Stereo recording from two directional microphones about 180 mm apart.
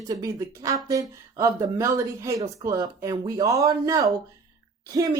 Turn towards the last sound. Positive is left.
turn(degrees=-20)  # may be behind; listen again after turning